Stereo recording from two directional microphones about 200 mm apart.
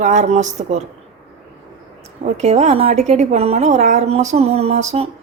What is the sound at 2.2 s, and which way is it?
Speech, 35° right (ahead or behind).